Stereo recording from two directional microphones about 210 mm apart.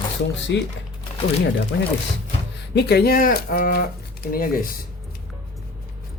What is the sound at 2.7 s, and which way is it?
Speech, 50° left (ahead or behind).